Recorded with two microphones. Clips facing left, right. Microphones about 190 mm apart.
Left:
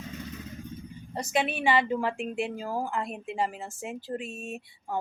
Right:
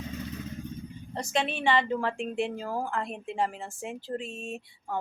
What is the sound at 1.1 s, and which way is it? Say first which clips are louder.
Speech: left 1 dB; 10° left (ahead or behind).